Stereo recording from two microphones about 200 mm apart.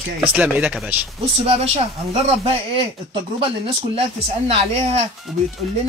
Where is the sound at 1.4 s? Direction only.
30° right (ahead or behind).